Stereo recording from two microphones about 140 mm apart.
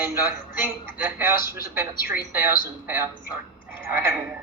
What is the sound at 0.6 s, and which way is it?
Speech, 15° right (ahead or behind).